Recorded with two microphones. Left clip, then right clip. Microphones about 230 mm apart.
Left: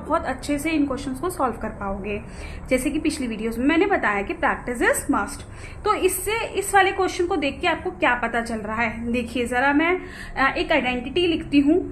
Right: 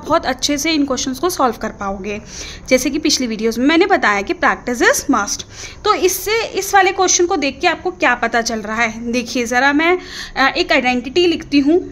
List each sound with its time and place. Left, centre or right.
0.1 s a woman's voice: right